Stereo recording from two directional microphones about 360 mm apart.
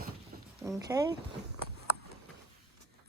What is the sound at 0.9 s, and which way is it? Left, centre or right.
Speech, centre.